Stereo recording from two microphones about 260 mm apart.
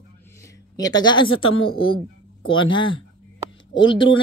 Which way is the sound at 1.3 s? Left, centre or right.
Left.